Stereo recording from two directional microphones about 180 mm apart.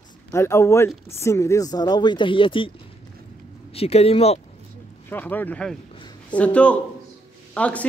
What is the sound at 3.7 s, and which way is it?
Speech, 35° left (ahead or behind).